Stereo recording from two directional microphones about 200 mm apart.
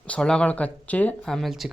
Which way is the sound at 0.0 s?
5° left (ahead or behind).